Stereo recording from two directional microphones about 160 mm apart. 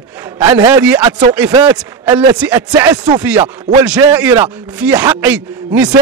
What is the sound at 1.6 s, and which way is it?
A man's voice, 10° right (ahead or behind).